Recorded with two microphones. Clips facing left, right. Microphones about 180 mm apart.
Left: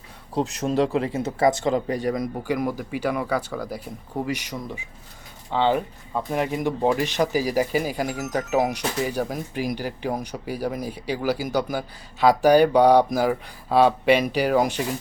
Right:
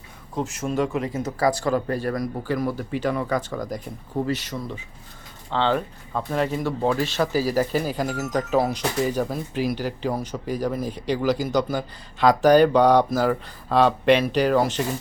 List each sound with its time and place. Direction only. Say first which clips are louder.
0.3 s speech: left 3 dB; 35° left (ahead or behind); by 14.8 s 10° left (ahead or behind)